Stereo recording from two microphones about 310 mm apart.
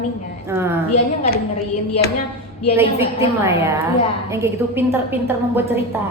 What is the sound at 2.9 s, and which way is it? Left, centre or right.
Speech, centre.